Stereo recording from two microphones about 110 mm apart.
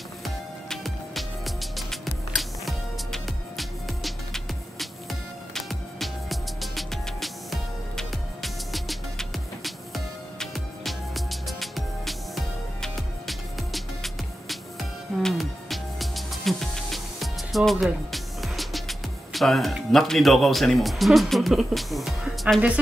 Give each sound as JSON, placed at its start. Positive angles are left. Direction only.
{"t": 0.2, "sound": "music", "side_deg": 0}